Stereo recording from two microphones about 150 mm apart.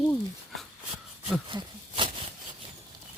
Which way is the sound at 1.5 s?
35° right (ahead or behind).